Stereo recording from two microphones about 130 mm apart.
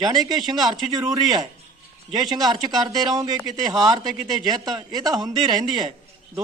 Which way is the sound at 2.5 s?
30° right (ahead or behind).